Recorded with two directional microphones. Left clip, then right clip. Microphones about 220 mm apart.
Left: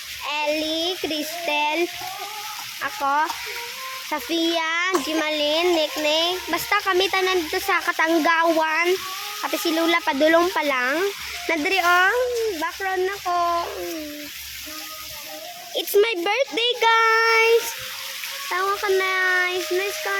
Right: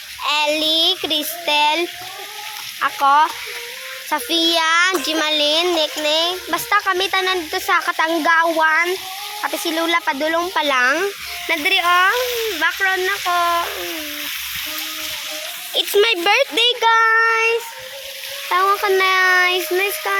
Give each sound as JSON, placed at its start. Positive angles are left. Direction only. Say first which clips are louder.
{"t": 0.3, "sound": "speech", "louder": "right 7 dB", "side_deg": -5}
{"t": 2.8, "sound": "a child's voice", "louder": "right 8 dB", "side_deg": 0}
{"t": 6.7, "sound": "speech", "louder": "right 3 dB", "side_deg": 15}
{"t": 10.2, "sound": "speech", "louder": "left 2 dB", "side_deg": 25}
{"t": 10.5, "sound": "a child's voice", "louder": "right 5 dB", "side_deg": 5}
{"t": 11.4, "sound": "speech", "louder": "right 3 dB", "side_deg": 20}
{"t": 12.5, "sound": "a child's voice", "louder": "right 7 dB", "side_deg": 5}
{"t": 15.9, "sound": "speech", "louder": "right 4 dB", "side_deg": 0}
{"t": 18.4, "sound": "speech", "louder": "right 7 dB", "side_deg": -15}